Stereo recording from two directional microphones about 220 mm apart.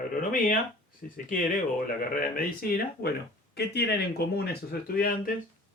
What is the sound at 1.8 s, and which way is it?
Speech, 40° left (ahead or behind).